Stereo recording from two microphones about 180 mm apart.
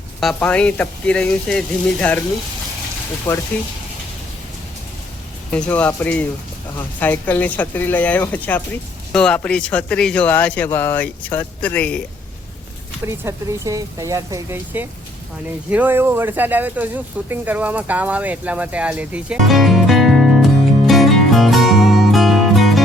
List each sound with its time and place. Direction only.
0.2 s speech: 5° left (ahead or behind)
3.3 s speech: 15° left (ahead or behind)
5.5 s speech: 5° left (ahead or behind)
13.1 s speech: 15° right (ahead or behind); by 22.8 s centre (ahead or behind)